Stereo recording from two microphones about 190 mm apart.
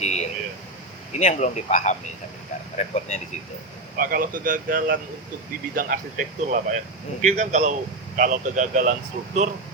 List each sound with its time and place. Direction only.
0.0 s speech: 35° left (ahead or behind)
3.9 s speech: 50° right (ahead or behind)